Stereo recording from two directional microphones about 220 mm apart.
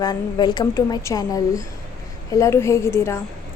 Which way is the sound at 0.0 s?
20° left (ahead or behind).